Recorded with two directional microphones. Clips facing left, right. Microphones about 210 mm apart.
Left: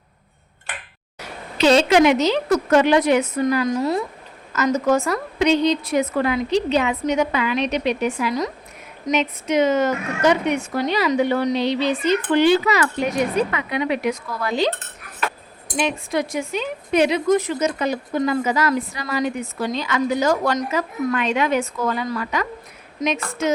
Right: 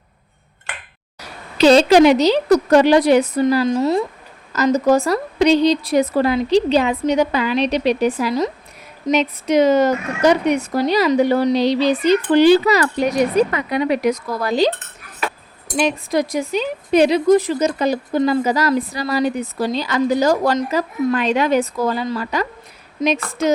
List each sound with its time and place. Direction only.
1.5 s a woman's voice: 35° right (ahead or behind)
15.8 s a woman's voice: 40° right (ahead or behind)